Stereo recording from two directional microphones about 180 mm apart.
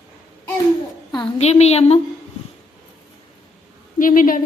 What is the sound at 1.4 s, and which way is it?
Speech, 35° left (ahead or behind).